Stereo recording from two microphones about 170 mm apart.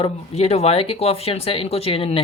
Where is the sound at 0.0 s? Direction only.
40° left (ahead or behind).